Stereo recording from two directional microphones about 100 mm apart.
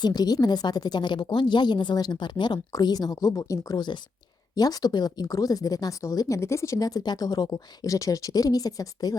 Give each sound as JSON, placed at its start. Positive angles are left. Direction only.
{"t": 0.0, "sound": "a woman's voice", "side_deg": 45}